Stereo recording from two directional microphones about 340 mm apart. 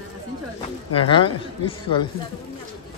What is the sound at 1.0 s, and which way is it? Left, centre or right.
Speech, centre.